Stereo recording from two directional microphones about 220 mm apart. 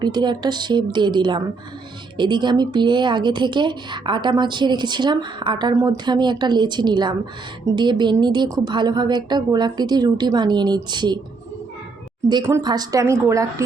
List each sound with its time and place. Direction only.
0.0 s a woman's voice: 20° right (ahead or behind)
12.3 s speech: 15° right (ahead or behind)